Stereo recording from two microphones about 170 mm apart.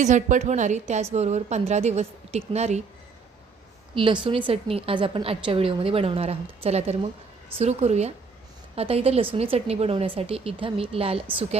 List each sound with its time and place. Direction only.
0.0 s a woman's voice: 45° right (ahead or behind)
3.9 s a woman's voice: 30° right (ahead or behind)